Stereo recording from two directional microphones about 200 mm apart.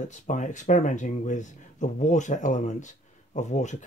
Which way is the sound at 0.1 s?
40° left (ahead or behind).